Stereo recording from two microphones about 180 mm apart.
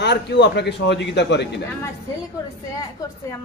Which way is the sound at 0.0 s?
70° left (ahead or behind).